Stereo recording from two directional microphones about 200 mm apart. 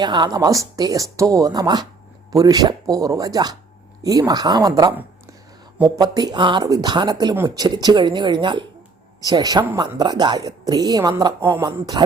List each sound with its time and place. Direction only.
0.0 s a woman's voice: 20° right (ahead or behind)